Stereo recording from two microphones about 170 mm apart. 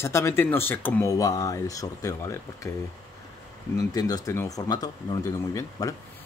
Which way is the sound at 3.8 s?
20° left (ahead or behind).